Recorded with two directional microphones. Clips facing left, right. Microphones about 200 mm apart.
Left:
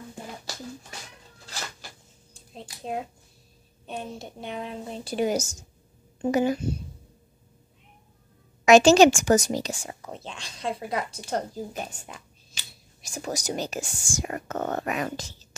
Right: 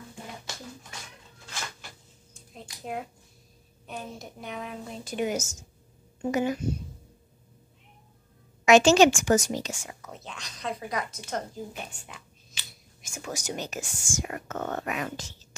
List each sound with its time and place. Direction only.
1.4 s cat: 35° left (ahead or behind)
2.3 s a sound: 25° left (ahead or behind)
3.8 s a woman's voice: 30° left (ahead or behind)
8.6 s a woman's voice: 40° left (ahead or behind)